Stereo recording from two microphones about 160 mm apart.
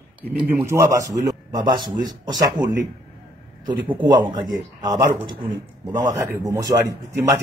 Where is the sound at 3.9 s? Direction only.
30° right (ahead or behind).